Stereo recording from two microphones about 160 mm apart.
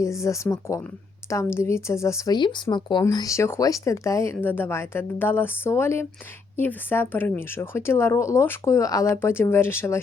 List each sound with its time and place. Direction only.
0.0 s a woman's voice: 20° left (ahead or behind)